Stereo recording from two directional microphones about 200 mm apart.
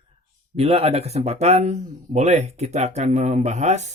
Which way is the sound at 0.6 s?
30° right (ahead or behind).